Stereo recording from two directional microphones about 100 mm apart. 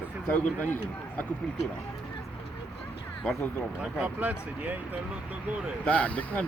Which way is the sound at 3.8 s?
10° right (ahead or behind).